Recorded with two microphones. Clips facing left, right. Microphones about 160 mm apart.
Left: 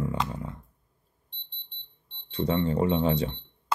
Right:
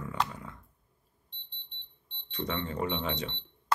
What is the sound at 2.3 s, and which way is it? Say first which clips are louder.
Speech: left 8 dB; 30° left (ahead or behind).